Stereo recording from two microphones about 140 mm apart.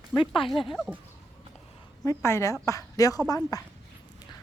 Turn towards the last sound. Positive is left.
turn(degrees=25)  # may be behind; listen again after turning